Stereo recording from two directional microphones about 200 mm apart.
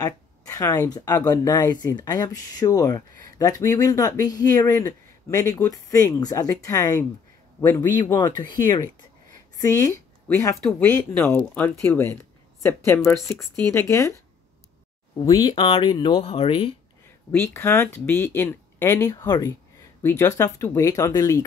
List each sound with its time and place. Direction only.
0.0 s speech: 15° left (ahead or behind)
13.3 s speech: centre (ahead or behind)
13.7 s speech: 15° left (ahead or behind)
15.1 s speech: 20° left (ahead or behind)
17.3 s speech: 10° left (ahead or behind)